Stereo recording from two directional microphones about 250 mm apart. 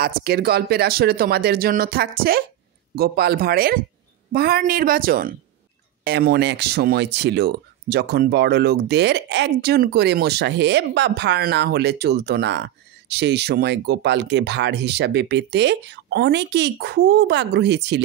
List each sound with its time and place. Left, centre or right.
0.0 s speech: right